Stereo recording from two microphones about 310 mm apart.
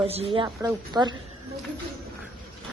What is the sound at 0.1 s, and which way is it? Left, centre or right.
Speech, centre.